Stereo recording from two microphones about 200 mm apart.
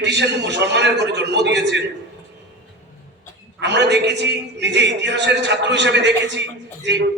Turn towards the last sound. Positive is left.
turn(degrees=-60)  # may be behind; listen again after turning